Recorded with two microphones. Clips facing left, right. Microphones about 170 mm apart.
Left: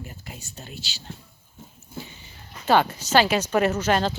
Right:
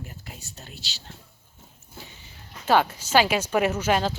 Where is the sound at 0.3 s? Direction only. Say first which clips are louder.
Left 3 dB; centre (ahead or behind).